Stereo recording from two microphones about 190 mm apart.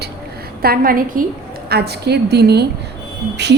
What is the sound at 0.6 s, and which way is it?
Speech, 50° right (ahead or behind).